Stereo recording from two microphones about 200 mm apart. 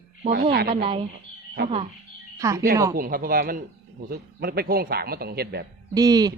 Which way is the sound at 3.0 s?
45° right (ahead or behind).